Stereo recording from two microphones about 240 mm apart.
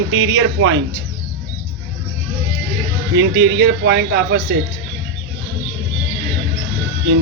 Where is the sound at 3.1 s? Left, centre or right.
Right.